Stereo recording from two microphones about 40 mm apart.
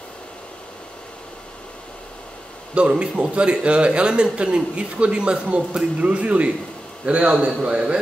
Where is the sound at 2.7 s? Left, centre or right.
Right.